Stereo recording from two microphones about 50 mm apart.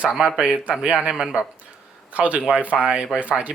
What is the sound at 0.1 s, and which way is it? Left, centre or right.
Speech, centre.